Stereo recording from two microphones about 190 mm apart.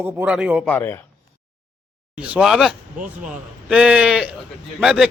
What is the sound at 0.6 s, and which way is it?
Speech, 10° left (ahead or behind).